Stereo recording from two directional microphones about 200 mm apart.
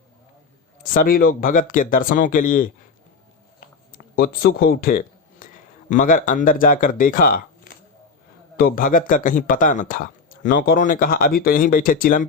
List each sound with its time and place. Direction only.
0.9 s speech: 45° left (ahead or behind)
3.9 s a sound: 50° left (ahead or behind)
6.0 s speech: 45° left (ahead or behind)
8.5 s speech: 45° left (ahead or behind)